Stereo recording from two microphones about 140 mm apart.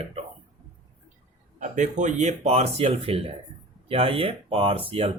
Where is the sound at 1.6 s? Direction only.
60° right (ahead or behind).